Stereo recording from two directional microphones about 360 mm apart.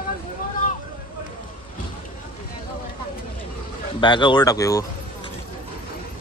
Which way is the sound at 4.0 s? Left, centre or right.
Centre.